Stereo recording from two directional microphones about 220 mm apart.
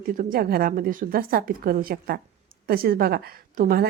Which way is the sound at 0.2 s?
40° right (ahead or behind).